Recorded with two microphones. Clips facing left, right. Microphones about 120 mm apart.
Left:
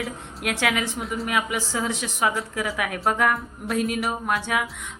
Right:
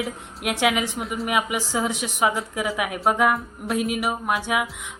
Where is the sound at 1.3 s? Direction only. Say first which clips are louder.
Right 3 dB; 15° right (ahead or behind).